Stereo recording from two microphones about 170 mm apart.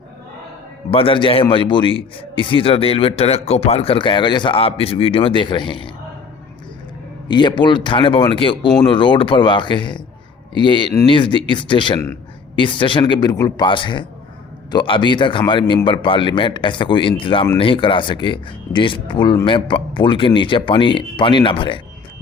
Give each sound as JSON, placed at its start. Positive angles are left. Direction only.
{"t": 0.9, "sound": "a man's voice", "side_deg": 30}
{"t": 7.3, "sound": "speech", "side_deg": 25}